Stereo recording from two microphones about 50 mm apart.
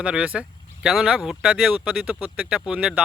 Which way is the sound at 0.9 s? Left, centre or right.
Centre.